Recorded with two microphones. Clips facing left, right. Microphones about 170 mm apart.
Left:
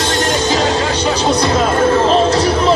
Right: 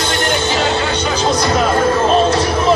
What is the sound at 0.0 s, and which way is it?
Music, 40° left (ahead or behind).